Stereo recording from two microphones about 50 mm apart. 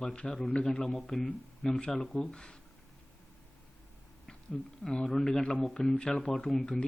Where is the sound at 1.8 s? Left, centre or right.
Centre.